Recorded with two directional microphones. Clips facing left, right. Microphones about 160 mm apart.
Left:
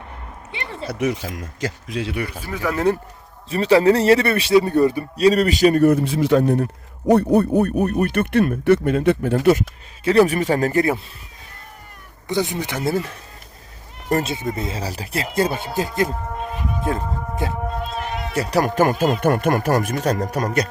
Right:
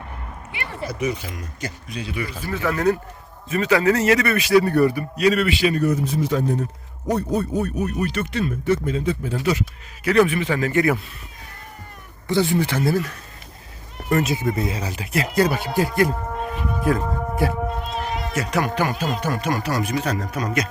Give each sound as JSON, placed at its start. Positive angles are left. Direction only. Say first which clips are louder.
{"t": 0.5, "sound": "a sound", "louder": "even", "side_deg": 25}
{"t": 0.9, "sound": "speech", "louder": "left 3 dB", "side_deg": 90}
{"t": 2.3, "sound": "speech", "louder": "even", "side_deg": 15}
{"t": 3.5, "sound": "a man's voice", "louder": "left 4 dB", "side_deg": 30}
{"t": 5.1, "sound": "speech", "louder": "left 3 dB", "side_deg": 35}
{"t": 10.0, "sound": "speech", "louder": "left 2 dB", "side_deg": 30}
{"t": 10.2, "sound": "a man's voice", "louder": "left 3 dB", "side_deg": 40}
{"t": 12.3, "sound": "speech", "louder": "right 3 dB", "side_deg": 20}
{"t": 16.8, "sound": "a sound", "louder": "right 4 dB", "side_deg": 20}
{"t": 18.3, "sound": "speech", "louder": "left 5 dB", "side_deg": 40}